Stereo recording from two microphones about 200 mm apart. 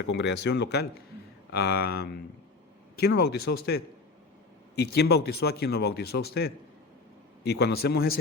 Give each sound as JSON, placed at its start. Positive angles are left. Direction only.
{"t": 0.0, "sound": "speech", "side_deg": 60}